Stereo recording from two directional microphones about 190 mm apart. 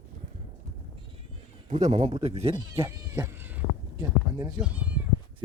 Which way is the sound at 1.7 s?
35° right (ahead or behind).